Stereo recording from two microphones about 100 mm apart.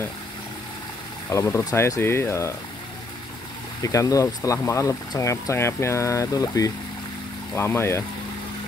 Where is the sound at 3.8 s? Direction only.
35° left (ahead or behind).